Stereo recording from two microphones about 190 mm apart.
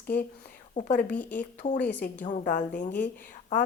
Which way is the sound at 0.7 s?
40° left (ahead or behind).